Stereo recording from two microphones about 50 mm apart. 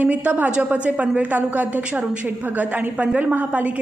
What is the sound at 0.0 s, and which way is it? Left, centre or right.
A woman's voice, right.